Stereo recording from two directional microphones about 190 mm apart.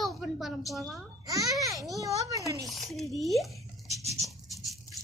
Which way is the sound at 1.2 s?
20° right (ahead or behind).